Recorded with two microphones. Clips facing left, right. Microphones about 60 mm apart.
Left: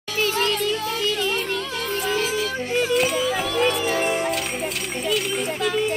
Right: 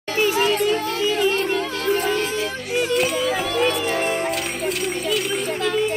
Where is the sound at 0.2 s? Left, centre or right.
Centre.